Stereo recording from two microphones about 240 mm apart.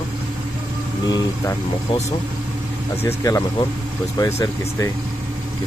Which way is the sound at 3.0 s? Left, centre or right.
Centre.